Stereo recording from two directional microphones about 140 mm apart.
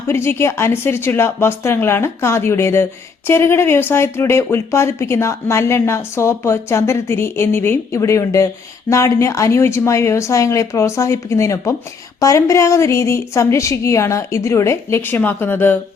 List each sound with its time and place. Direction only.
0.1 s speech: 15° left (ahead or behind)